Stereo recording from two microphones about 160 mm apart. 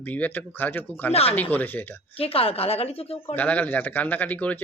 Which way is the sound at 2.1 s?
35° left (ahead or behind).